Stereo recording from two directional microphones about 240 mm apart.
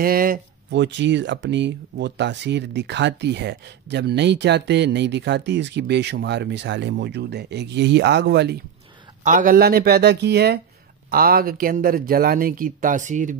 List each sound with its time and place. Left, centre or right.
0.0 s speech: right
9.2 s speech: right